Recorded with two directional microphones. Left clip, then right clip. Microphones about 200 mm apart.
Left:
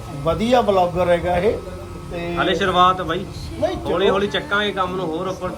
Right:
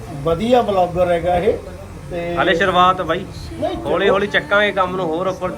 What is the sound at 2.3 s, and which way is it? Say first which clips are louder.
Speech: right 3 dB; 15° left (ahead or behind).